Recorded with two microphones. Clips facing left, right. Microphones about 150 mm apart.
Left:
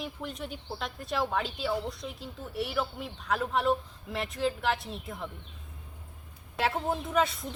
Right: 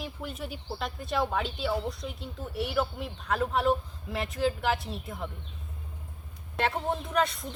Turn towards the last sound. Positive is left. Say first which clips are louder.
# even
turn(degrees=0)  # may be behind; listen again after turning